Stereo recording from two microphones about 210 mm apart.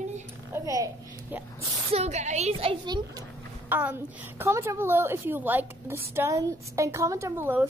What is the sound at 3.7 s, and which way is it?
A woman's voice, 10° right (ahead or behind).